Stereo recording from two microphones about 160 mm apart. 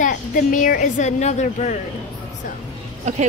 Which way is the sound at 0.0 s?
55° left (ahead or behind).